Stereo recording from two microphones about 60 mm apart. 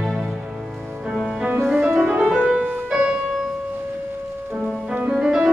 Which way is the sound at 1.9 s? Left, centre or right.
Centre.